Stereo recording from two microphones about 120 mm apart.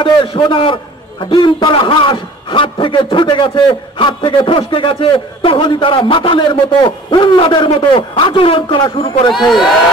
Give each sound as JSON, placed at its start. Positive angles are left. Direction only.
{"t": 0.0, "sound": "a man's voice", "side_deg": 45}
{"t": 9.3, "sound": "speech", "side_deg": 0}